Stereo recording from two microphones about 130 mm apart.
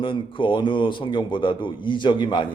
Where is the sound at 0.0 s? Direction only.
40° left (ahead or behind).